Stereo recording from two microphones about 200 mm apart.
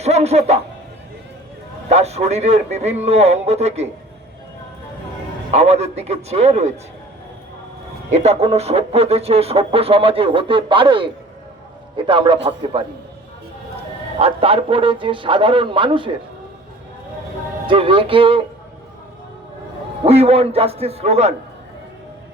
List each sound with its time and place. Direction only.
0.0 s music: 35° right (ahead or behind)
1.9 s speech: 35° right (ahead or behind)
5.5 s speech: 30° right (ahead or behind)
8.1 s a man's voice: 35° right (ahead or behind)
14.2 s a man's voice: 30° right (ahead or behind)
17.7 s a man's voice: 25° right (ahead or behind)
20.1 s a man's voice: 30° right (ahead or behind)